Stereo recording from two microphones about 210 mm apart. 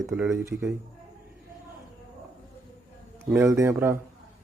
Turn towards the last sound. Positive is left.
turn(degrees=-10)  # may be behind; listen again after turning